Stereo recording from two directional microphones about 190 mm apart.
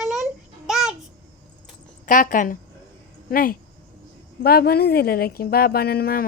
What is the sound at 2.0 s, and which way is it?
Speech, 45° left (ahead or behind).